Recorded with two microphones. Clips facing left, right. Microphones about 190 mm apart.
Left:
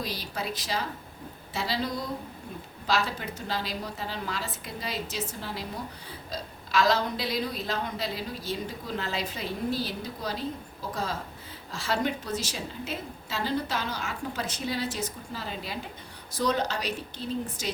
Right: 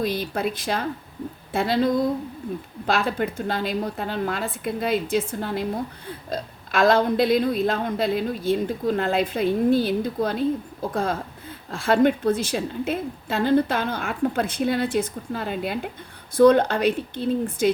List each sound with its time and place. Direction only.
0.0 s a woman's voice: 55° right (ahead or behind)